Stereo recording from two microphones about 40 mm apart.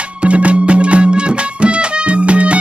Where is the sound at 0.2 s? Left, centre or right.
Right.